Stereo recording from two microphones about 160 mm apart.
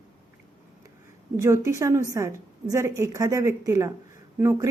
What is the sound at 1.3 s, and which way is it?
A woman's voice, 15° right (ahead or behind).